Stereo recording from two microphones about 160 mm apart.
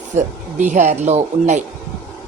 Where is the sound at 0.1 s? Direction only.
50° right (ahead or behind).